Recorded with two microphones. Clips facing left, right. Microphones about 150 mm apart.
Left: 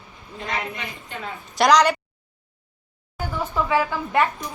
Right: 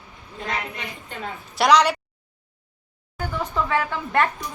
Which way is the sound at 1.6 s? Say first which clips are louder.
Left 1 dB; centre (ahead or behind).